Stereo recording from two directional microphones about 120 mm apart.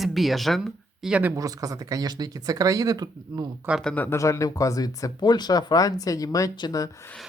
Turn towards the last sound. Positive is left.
turn(degrees=30)  # may be behind; listen again after turning